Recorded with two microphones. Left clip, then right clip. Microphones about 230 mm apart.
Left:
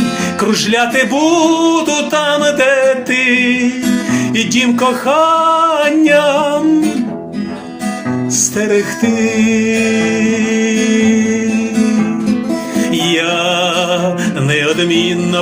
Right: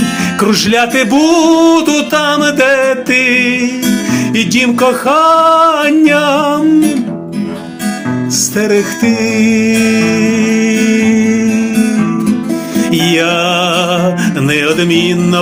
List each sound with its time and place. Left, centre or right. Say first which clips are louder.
0.4 s a sound: right 2 dB; right
4.1 s music: right 2 dB; right
8.4 s music: right 2 dB; right
14.5 s music: right 1 dB; right